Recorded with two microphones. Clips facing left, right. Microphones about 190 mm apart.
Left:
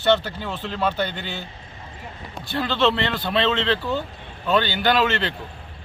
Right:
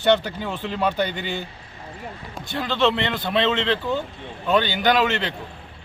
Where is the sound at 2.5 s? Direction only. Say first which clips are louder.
Even; 15° right (ahead or behind).